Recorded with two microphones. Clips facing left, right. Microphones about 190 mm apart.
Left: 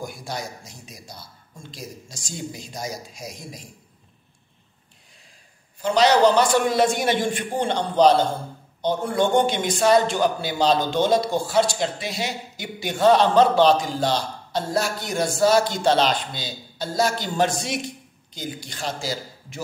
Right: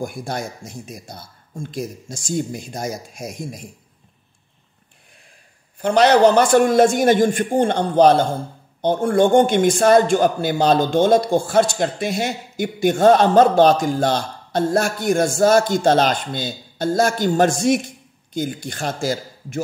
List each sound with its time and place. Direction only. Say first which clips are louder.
0.0 s a man's voice: right 5 dB; 50° right (ahead or behind)
5.8 s a man's voice: right 4 dB; 55° right (ahead or behind)